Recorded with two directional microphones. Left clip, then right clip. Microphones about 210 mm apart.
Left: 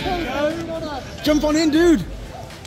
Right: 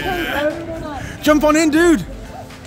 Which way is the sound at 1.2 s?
25° right (ahead or behind).